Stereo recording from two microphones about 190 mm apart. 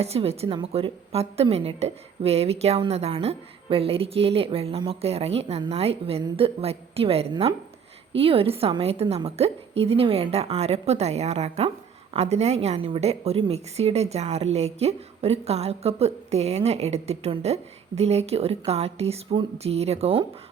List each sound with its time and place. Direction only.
0.0 s a woman's voice: 30° right (ahead or behind)